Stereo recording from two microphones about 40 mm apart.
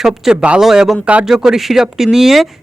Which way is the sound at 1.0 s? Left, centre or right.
Right.